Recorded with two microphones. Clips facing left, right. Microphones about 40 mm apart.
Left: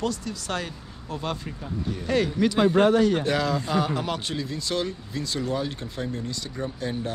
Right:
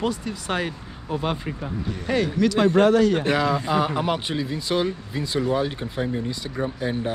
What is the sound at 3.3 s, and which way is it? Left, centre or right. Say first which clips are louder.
Speech: right 3 dB; centre.